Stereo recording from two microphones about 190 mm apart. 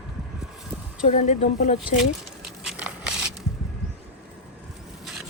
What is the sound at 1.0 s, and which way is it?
Speech, 40° left (ahead or behind).